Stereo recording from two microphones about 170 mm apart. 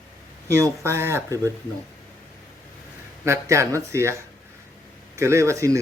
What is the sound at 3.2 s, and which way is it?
Speech, 15° right (ahead or behind).